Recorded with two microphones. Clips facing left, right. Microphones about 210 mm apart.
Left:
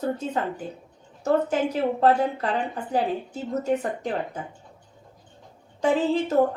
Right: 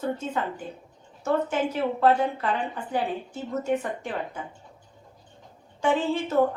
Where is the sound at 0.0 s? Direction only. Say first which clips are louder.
Left 2 dB; 35° left (ahead or behind).